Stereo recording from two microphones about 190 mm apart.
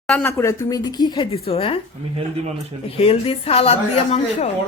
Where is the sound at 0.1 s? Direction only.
10° left (ahead or behind); by 1.8 s 30° left (ahead or behind).